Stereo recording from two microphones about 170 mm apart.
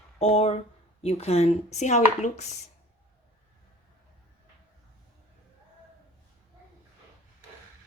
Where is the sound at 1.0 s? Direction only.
35° left (ahead or behind).